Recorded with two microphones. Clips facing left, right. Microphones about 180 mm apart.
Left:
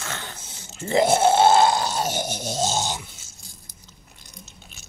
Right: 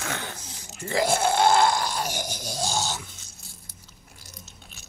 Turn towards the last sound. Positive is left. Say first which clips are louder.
# left 2 dB
turn(degrees=0)  # may be behind; listen again after turning